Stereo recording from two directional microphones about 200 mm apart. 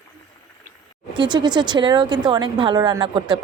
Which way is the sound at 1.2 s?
20° right (ahead or behind).